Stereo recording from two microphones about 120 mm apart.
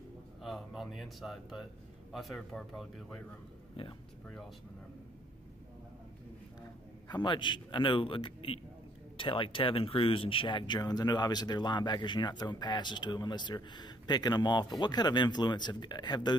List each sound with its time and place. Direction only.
0.4 s speech: centre (ahead or behind)
7.1 s speech: 40° left (ahead or behind)